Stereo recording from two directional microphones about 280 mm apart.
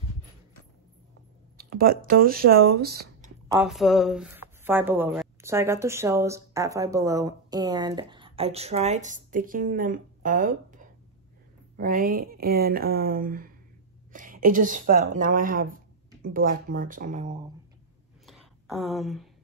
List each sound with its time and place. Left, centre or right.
1.6 s speech: right
3.5 s a woman's voice: centre; by 17.4 s right
18.2 s a sound: centre